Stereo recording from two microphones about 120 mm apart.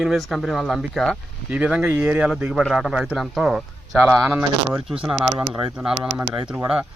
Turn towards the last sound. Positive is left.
turn(degrees=-10)  # may be behind; listen again after turning